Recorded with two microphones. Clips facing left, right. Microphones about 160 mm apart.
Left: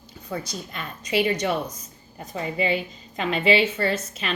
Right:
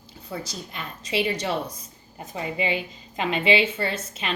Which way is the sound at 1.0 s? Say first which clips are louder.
Left 3 dB; 25° right (ahead or behind).